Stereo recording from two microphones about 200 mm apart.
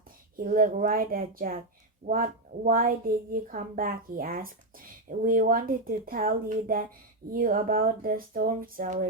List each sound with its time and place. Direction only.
0.3 s speech: 45° right (ahead or behind)